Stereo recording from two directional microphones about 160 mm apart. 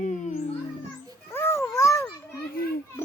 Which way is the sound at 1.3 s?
15° left (ahead or behind).